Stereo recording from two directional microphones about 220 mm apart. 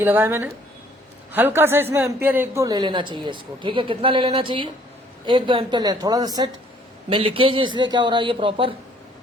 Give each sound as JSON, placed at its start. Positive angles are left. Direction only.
{"t": 0.0, "sound": "a man's voice", "side_deg": -10}